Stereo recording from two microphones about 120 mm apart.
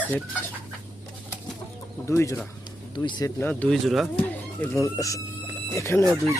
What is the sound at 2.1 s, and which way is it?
Speech, 25° left (ahead or behind).